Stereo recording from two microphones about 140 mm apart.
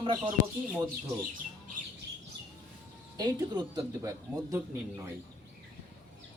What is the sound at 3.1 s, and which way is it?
Speech, 25° right (ahead or behind).